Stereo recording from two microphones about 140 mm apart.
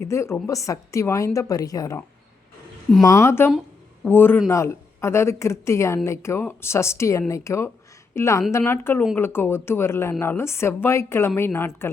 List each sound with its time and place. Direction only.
0.0 s a woman's voice: 20° left (ahead or behind)